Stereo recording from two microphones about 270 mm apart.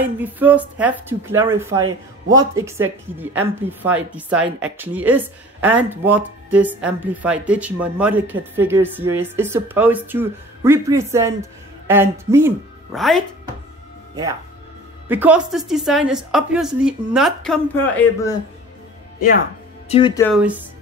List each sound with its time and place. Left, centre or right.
0.0 s speech: centre
15.0 s speech: centre
19.1 s speech: left
19.9 s speech: centre